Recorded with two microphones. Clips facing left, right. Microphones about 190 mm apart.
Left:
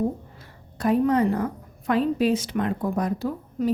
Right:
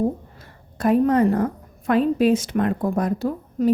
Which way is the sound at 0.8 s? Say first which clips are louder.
Right 3 dB; 50° right (ahead or behind).